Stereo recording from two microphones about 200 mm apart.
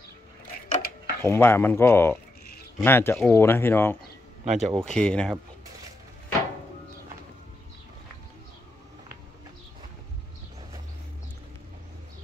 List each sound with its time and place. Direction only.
0.7 s a sound: 50° left (ahead or behind)
1.2 s speech: 10° left (ahead or behind)
4.5 s speech: 35° right (ahead or behind)
4.7 s speech: 5° left (ahead or behind)